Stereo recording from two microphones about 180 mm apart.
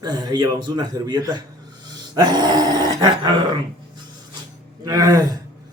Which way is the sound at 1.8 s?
20° right (ahead or behind).